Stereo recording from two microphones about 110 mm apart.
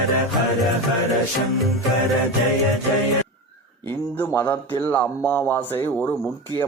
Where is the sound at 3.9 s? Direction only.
20° left (ahead or behind).